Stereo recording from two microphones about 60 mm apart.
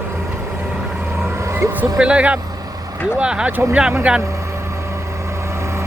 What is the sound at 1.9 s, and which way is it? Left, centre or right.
Speech, centre.